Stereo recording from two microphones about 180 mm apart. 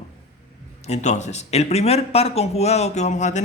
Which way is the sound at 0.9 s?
40° left (ahead or behind).